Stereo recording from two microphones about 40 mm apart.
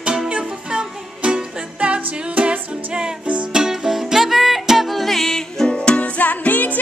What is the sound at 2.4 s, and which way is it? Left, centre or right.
Music, right.